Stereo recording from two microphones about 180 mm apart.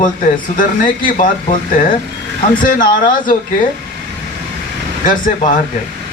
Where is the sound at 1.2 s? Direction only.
45° left (ahead or behind).